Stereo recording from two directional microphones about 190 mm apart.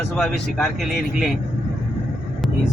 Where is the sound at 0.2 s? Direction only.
Centre (ahead or behind).